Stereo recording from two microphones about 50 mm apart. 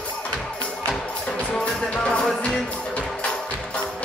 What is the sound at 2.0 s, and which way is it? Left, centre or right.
Music, centre.